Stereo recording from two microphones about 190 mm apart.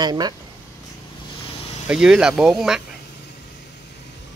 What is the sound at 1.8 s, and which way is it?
Speech, 5° right (ahead or behind).